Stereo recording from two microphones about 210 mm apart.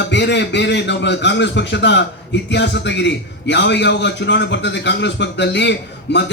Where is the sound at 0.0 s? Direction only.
55° left (ahead or behind).